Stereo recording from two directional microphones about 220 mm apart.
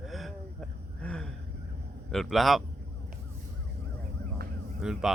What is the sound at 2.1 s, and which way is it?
Speech, centre (ahead or behind).